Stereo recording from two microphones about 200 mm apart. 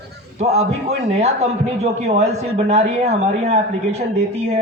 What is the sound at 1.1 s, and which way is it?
A man's voice, 30° right (ahead or behind).